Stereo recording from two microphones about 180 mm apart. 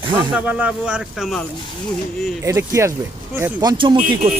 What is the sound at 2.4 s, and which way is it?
Speech, 15° right (ahead or behind).